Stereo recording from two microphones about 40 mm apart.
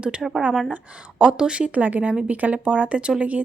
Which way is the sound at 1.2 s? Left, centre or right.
Right.